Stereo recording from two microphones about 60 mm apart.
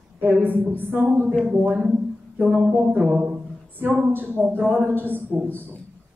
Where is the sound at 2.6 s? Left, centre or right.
Right.